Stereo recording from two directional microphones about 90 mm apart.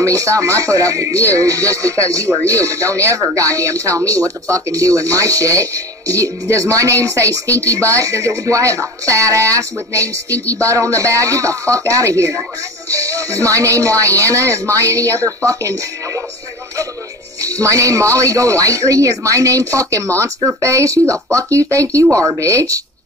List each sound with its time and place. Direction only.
0.0 s speech: 35° right (ahead or behind)
17.4 s speech: 35° right (ahead or behind)